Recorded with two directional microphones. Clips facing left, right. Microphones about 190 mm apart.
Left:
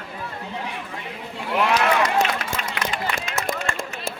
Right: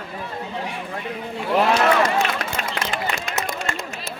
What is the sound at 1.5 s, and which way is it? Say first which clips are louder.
Speech: right 2 dB; 35° right (ahead or behind).